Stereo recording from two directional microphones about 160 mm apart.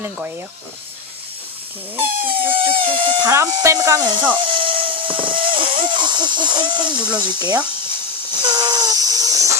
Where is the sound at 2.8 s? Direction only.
35° right (ahead or behind).